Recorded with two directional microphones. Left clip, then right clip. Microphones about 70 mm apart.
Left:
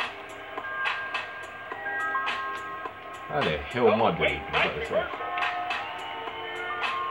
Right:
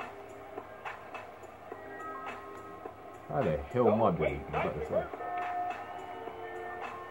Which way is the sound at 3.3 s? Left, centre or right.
Right.